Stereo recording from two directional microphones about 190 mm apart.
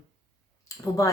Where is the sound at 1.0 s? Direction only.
15° left (ahead or behind).